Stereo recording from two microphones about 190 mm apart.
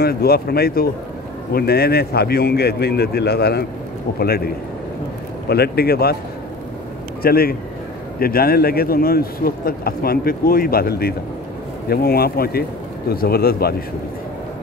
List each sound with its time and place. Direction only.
0.0 s speech: 55° left (ahead or behind)
5.5 s speech: 55° left (ahead or behind)
7.2 s a man's voice: 55° left (ahead or behind)